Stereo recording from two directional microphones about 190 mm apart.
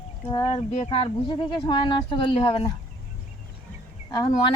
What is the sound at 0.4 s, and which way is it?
Speech, 30° left (ahead or behind).